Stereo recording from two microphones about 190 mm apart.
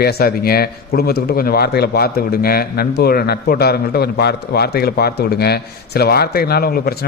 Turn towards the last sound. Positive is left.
turn(degrees=55)  # may be behind; listen again after turning